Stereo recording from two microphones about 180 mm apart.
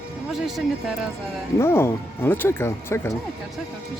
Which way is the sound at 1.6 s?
15° left (ahead or behind).